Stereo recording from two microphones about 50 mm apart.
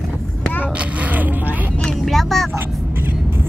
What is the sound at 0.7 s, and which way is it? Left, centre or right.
Music, right.